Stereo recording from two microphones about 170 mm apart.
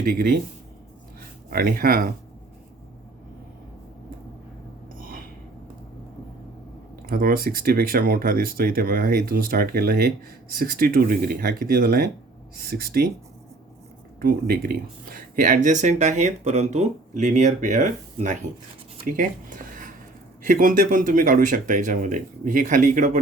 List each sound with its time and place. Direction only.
0.0 s speech: 60° right (ahead or behind)
1.5 s speech: 60° right (ahead or behind)
4.9 s a sound: 55° right (ahead or behind)
7.1 s speech: 60° right (ahead or behind)
14.2 s speech: 60° right (ahead or behind); by 18.4 s 45° right (ahead or behind)
19.0 s a sound: 50° right (ahead or behind)
20.4 s speech: 50° right (ahead or behind)